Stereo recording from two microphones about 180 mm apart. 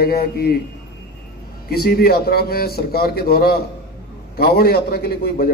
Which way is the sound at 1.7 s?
60° left (ahead or behind).